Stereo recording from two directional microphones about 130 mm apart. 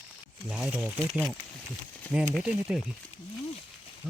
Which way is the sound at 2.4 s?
5° right (ahead or behind).